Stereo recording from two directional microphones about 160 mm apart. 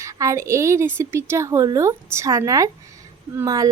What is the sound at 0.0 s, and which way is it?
A woman's voice, 20° right (ahead or behind).